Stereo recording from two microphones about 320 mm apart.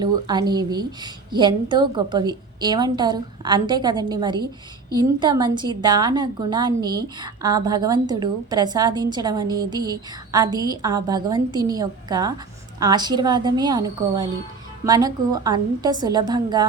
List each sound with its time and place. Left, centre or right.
0.0 s a woman's voice: centre